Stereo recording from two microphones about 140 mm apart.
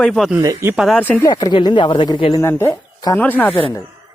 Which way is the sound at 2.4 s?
20° left (ahead or behind).